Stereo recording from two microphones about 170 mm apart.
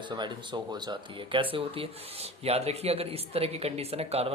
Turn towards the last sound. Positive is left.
turn(degrees=-35)  # may be behind; listen again after turning